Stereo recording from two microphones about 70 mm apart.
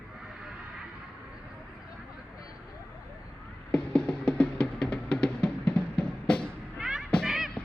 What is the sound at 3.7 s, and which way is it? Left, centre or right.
Music, centre.